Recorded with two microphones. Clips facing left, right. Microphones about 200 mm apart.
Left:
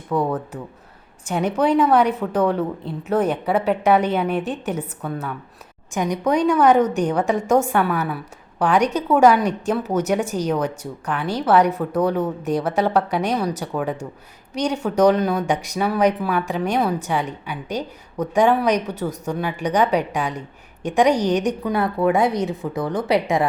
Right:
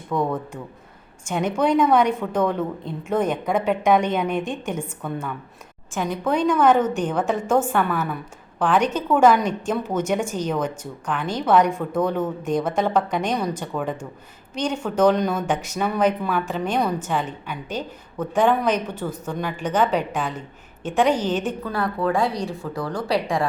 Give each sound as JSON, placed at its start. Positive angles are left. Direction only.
{"t": 0.1, "sound": "a woman's voice", "side_deg": 10}